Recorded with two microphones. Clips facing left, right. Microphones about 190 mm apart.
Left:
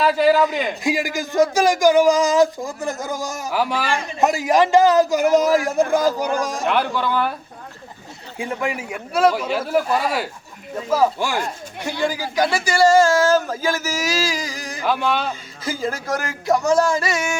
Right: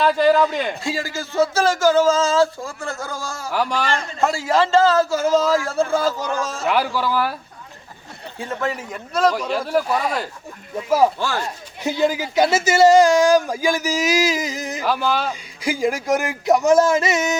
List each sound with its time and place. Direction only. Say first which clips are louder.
0.0 s a man's voice: even; 5° left (ahead or behind)
0.8 s a man's voice: left 4 dB; 15° left (ahead or behind)
3.5 s a man's voice: even; 5° left (ahead or behind)
6.7 s speech: right 2 dB; 5° right (ahead or behind)
8.4 s a man's voice: left 1 dB; 15° left (ahead or behind)
10.8 s speech: right 2 dB; 10° right (ahead or behind)
11.2 s a man's voice: left 1 dB; 15° left (ahead or behind)
11.9 s speech: right 4 dB; 20° right (ahead or behind)
14.8 s speech: left 1 dB; centre (ahead or behind)
15.3 s speech: right 2 dB; 15° right (ahead or behind)